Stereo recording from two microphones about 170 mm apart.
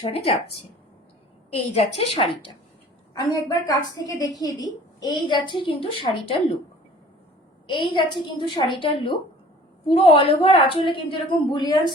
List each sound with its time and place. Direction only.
0.0 s a woman's voice: 35° left (ahead or behind)
1.7 s a woman's voice: 35° left (ahead or behind)
3.2 s a woman's voice: 20° left (ahead or behind)
7.7 s a woman's voice: 30° left (ahead or behind)